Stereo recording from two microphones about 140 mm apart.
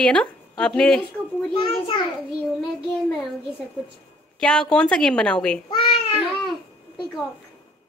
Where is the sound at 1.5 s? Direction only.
40° left (ahead or behind).